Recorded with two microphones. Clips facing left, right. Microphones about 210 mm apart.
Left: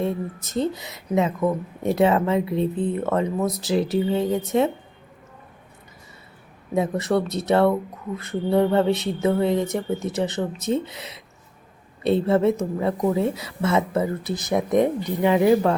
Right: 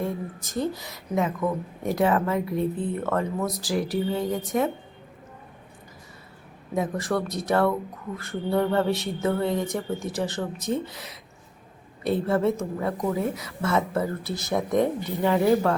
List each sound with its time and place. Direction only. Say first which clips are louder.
0.0 s a woman's voice: left 4 dB; 25° left (ahead or behind)
6.7 s a woman's voice: left 4 dB; 25° left (ahead or behind)